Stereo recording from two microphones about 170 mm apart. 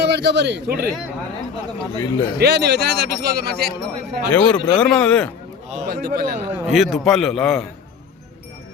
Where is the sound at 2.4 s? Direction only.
75° right (ahead or behind).